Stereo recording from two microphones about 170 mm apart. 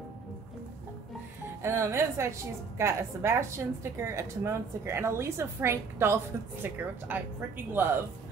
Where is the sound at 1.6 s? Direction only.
15° right (ahead or behind).